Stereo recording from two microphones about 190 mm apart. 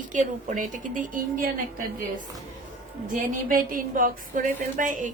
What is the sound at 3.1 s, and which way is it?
A woman's voice, 45° right (ahead or behind).